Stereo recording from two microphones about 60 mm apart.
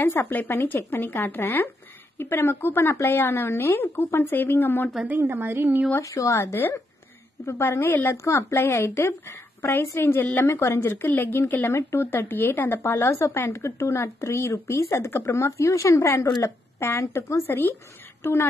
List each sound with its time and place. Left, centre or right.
0.0 s speech: left
5.0 s speech: right
5.9 s speech: left
6.4 s speech: left
8.2 s speech: left
10.4 s speech: left
11.1 s speech: left
11.7 s speech: left
17.1 s a woman's voice: left